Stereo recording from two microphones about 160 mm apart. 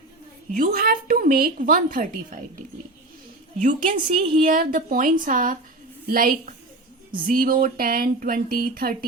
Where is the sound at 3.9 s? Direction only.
35° right (ahead or behind).